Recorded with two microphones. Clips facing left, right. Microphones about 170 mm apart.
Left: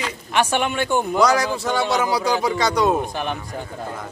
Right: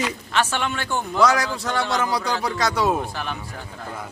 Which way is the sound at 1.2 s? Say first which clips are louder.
Left 2 dB; centre (ahead or behind).